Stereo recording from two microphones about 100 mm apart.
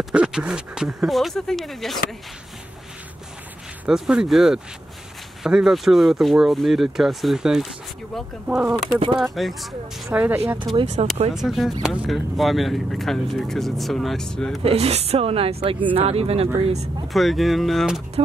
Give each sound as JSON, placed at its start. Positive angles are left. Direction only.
{"t": 0.1, "sound": "speech", "side_deg": -10}
{"t": 3.8, "sound": "speech", "side_deg": -5}
{"t": 11.0, "sound": "speech", "side_deg": -90}
{"t": 11.3, "sound": "speech", "side_deg": -5}
{"t": 14.6, "sound": "speech", "side_deg": -85}
{"t": 16.5, "sound": "speech", "side_deg": -75}
{"t": 17.1, "sound": "speech", "side_deg": 0}